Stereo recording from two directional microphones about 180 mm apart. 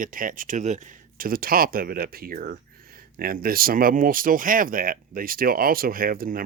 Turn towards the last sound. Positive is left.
turn(degrees=-55)  # may be behind; listen again after turning